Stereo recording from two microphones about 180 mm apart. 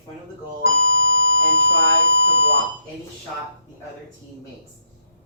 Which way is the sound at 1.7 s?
90° right.